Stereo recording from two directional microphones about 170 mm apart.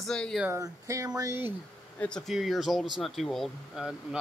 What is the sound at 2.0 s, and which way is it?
A man's voice, 5° left (ahead or behind).